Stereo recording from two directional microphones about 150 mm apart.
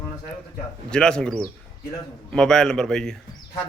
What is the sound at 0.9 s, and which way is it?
A man's voice, 5° left (ahead or behind).